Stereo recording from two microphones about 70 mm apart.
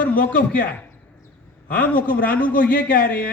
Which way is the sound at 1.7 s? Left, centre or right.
Centre.